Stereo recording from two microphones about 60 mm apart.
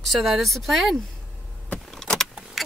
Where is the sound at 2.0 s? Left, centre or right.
Centre.